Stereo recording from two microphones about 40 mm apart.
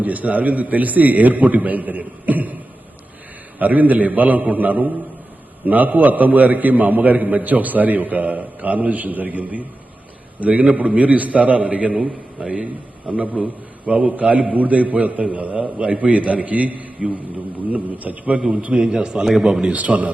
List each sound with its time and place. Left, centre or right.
0.0 s a man's voice: right
3.6 s a man's voice: right
11.9 s a man's voice: centre
13.1 s a man's voice: right
18.3 s a man's voice: centre
19.7 s a man's voice: right